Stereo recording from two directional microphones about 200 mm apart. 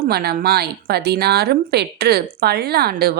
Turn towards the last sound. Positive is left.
turn(degrees=-50)  # may be behind; listen again after turning